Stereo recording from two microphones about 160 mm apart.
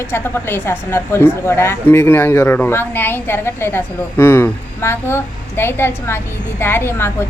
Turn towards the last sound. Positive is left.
turn(degrees=15)  # may be behind; listen again after turning